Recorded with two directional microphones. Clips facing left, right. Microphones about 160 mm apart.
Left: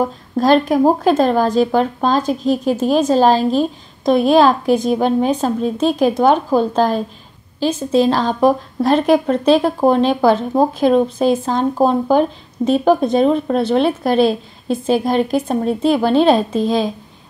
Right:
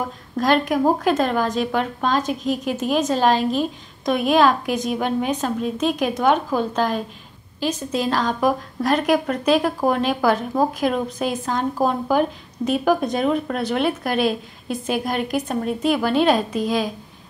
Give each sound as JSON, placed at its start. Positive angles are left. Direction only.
{"t": 0.0, "sound": "speech", "side_deg": 30}